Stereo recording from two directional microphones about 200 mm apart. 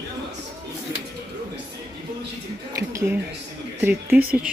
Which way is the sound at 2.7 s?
15° right (ahead or behind).